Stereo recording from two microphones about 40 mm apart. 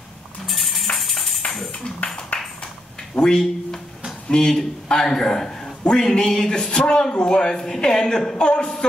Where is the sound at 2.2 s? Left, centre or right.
Left.